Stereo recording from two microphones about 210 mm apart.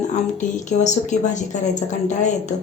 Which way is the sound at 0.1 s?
35° left (ahead or behind).